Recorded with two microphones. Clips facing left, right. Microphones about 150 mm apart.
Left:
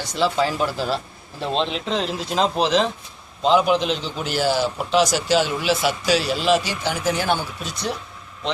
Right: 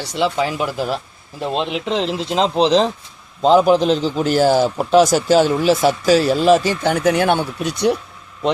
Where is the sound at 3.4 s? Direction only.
40° right (ahead or behind).